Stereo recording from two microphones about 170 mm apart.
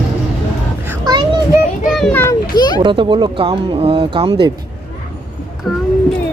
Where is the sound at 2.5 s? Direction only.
25° left (ahead or behind).